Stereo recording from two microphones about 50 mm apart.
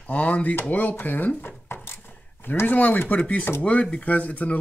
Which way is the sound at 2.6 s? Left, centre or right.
Left.